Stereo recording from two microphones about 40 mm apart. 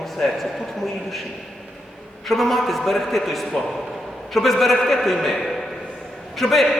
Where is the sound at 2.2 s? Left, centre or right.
Centre.